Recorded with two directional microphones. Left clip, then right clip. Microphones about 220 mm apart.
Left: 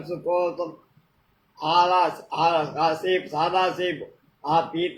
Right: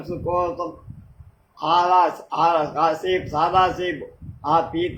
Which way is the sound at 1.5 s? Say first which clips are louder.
Right 2 dB; 15° right (ahead or behind).